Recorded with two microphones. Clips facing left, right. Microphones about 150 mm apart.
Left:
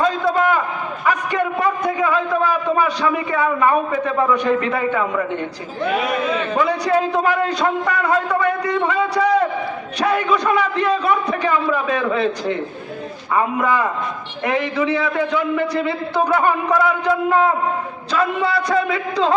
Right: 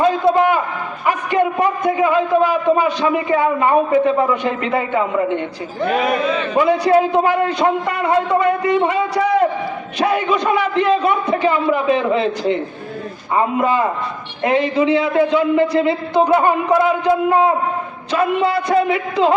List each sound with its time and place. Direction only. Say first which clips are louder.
0.0 s a sound: right 4 dB; 25° right (ahead or behind)
1.0 s a man's voice: right 3 dB; 20° right (ahead or behind)
6.6 s a man's voice: right 6 dB; 20° right (ahead or behind)
10.0 s a man's voice: right 1 dB; 25° right (ahead or behind)